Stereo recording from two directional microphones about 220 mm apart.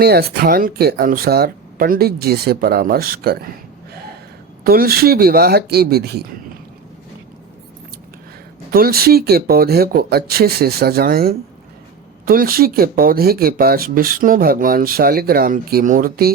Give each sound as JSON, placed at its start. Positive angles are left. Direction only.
{"t": 0.0, "sound": "speech", "side_deg": -45}
{"t": 4.6, "sound": "speech", "side_deg": -45}
{"t": 8.7, "sound": "speech", "side_deg": -45}